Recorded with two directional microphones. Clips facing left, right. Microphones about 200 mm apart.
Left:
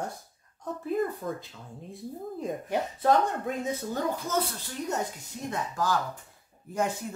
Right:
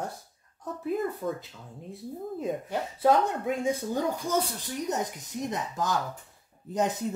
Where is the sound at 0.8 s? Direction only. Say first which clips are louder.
Even; 5° right (ahead or behind).